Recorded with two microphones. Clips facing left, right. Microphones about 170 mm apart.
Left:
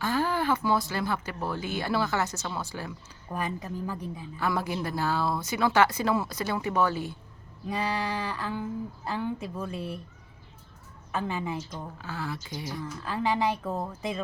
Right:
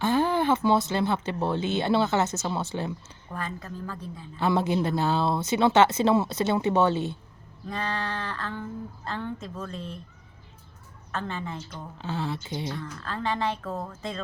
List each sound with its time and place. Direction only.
0.0 s speech: 20° right (ahead or behind)
3.3 s speech: 15° left (ahead or behind)
4.4 s speech: 25° right (ahead or behind)
7.7 s speech: 10° left (ahead or behind)
11.1 s speech: 10° left (ahead or behind)
11.9 s speech: 25° right (ahead or behind)
12.7 s speech: 15° left (ahead or behind)